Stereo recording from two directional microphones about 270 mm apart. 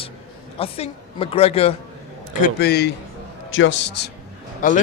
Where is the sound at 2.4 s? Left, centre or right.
Left.